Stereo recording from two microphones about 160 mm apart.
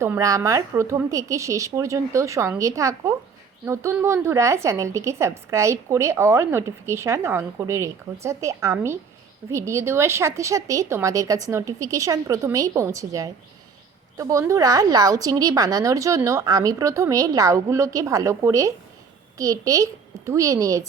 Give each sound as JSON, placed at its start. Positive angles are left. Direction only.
{"t": 0.0, "sound": "a woman's voice", "side_deg": -20}